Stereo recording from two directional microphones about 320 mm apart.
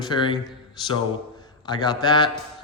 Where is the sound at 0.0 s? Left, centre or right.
Centre.